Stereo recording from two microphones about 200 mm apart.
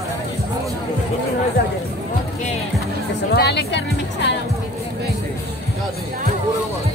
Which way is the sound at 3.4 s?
55° left (ahead or behind).